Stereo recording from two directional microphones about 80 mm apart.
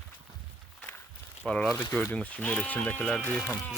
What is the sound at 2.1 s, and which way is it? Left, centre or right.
Speech, centre.